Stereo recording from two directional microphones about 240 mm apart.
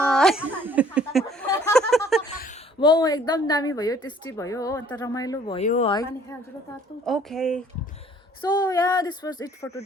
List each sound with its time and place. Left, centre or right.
0.0 s a sound: centre
2.8 s a woman's voice: centre
5.5 s speech: left
5.9 s a woman's voice: centre
7.0 s speech: centre
8.5 s a woman's voice: centre